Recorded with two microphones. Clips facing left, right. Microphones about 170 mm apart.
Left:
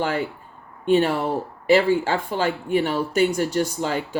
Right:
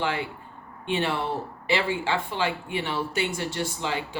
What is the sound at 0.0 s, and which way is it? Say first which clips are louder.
Speech: left 4 dB; 45° left (ahead or behind).